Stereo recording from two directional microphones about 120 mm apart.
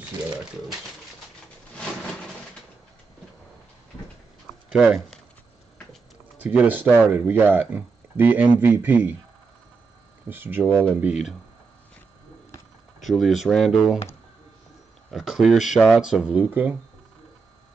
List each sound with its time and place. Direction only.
1.8 s a sound: 5° left (ahead or behind)
4.6 s speech: 5° right (ahead or behind)
6.4 s speech: 15° right (ahead or behind)
10.2 s speech: 15° right (ahead or behind)
13.0 s speech: centre (ahead or behind)
15.0 s speech: centre (ahead or behind)